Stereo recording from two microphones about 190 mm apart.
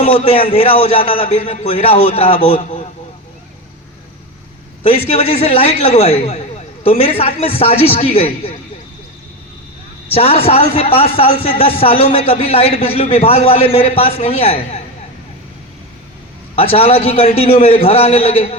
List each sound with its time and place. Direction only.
0.0 s speech: 30° left (ahead or behind)
4.8 s speech: 30° left (ahead or behind)
10.1 s speech: 30° left (ahead or behind)
16.6 s speech: 30° left (ahead or behind)